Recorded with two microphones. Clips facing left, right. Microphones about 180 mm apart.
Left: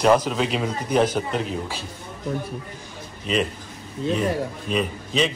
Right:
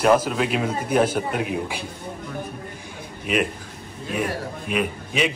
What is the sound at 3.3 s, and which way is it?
A man's voice, 10° right (ahead or behind).